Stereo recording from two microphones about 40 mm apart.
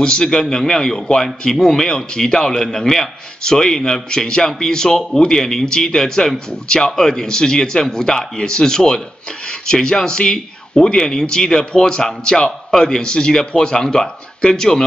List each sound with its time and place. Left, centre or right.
0.0 s a man's voice: centre